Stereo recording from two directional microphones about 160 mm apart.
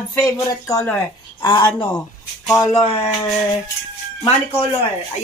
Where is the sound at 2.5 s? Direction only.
20° left (ahead or behind).